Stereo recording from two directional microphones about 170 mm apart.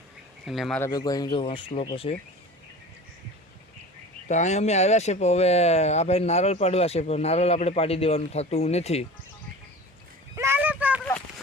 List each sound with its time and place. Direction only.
0.4 s speech: centre (ahead or behind)
0.8 s speech: 20° left (ahead or behind)
4.3 s speech: 45° left (ahead or behind)
10.3 s a sound: 15° right (ahead or behind)